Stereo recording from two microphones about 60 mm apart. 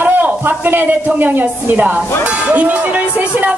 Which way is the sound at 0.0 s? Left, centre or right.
Right.